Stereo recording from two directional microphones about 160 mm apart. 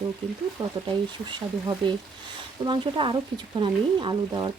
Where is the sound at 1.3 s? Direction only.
30° right (ahead or behind).